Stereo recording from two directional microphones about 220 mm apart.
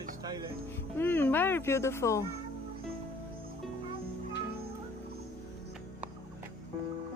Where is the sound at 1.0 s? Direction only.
10° left (ahead or behind).